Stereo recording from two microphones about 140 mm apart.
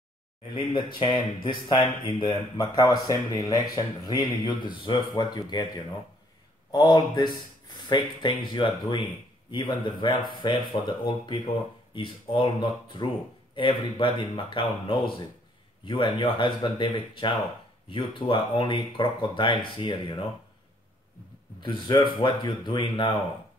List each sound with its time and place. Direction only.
0.7 s speech: 35° left (ahead or behind)
21.5 s speech: 35° left (ahead or behind)